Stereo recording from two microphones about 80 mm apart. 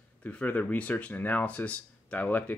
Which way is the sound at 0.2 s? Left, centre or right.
Centre.